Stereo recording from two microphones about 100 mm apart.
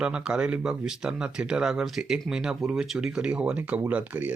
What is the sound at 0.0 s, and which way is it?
Speech, 10° right (ahead or behind).